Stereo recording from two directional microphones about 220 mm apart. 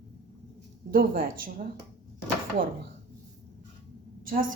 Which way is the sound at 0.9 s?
40° right (ahead or behind).